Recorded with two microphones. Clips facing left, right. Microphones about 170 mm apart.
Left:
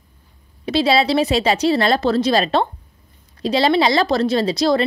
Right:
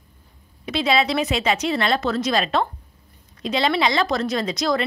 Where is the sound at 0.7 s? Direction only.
35° left (ahead or behind).